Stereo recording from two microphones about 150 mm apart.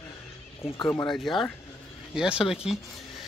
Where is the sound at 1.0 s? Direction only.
Centre (ahead or behind).